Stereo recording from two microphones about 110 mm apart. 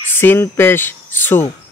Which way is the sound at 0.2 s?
20° left (ahead or behind).